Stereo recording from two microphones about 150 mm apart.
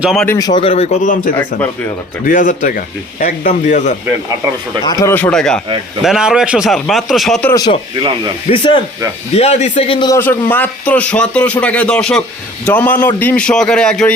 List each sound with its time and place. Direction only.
0.0 s a man's voice: centre (ahead or behind)
0.3 s speech: 25° left (ahead or behind)
0.6 s a man's voice: 45° left (ahead or behind)
4.4 s speech: 20° right (ahead or behind)
4.9 s a man's voice: 20° left (ahead or behind); by 7.5 s centre (ahead or behind)
7.9 s speech: 30° right (ahead or behind)
8.4 s speech: 35° left (ahead or behind)
9.3 s a man's voice: 45° left (ahead or behind)
10.1 s speech: 15° left (ahead or behind)